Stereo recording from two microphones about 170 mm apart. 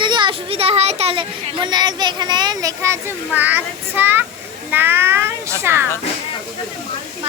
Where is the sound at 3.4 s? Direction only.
10° right (ahead or behind).